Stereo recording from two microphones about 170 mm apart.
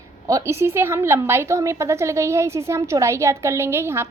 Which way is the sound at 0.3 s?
20° right (ahead or behind).